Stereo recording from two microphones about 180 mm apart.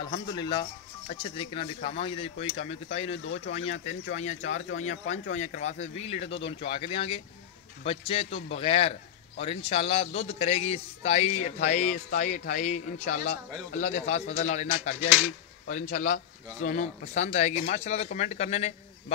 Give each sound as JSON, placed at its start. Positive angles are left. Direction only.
{"t": 0.0, "sound": "speech", "side_deg": 25}
{"t": 15.7, "sound": "a man's voice", "side_deg": 45}